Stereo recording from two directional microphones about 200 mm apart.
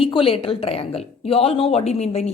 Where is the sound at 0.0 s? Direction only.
25° left (ahead or behind).